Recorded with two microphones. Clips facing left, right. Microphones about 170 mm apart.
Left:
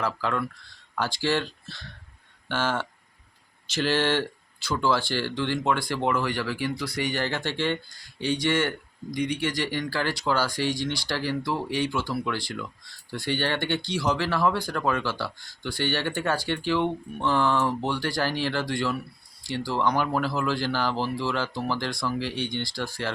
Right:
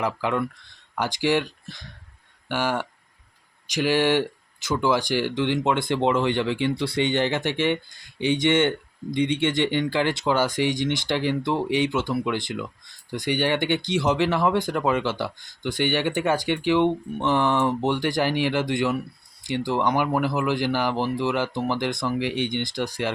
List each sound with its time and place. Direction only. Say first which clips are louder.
0.0 s speech: right 3 dB; 20° right (ahead or behind)